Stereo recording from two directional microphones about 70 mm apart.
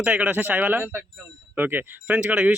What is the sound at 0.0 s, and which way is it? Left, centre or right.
Speech, centre.